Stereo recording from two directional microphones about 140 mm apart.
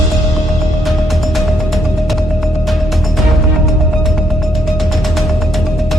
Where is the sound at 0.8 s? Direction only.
Centre (ahead or behind).